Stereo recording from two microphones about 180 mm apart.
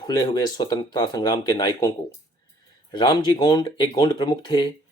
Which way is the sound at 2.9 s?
25° left (ahead or behind).